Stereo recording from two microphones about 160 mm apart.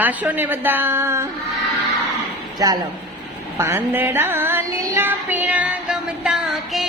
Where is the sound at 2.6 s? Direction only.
20° right (ahead or behind).